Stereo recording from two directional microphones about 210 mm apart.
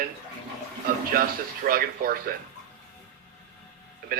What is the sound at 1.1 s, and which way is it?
Speech, 45° right (ahead or behind).